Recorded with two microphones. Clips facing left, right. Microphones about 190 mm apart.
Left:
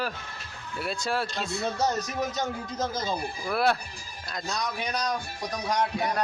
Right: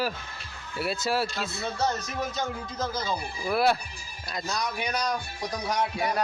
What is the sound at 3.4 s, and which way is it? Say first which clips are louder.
Music: right 2 dB; 5° right (ahead or behind).